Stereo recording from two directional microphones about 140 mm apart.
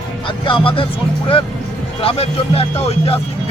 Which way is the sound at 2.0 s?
45° left (ahead or behind).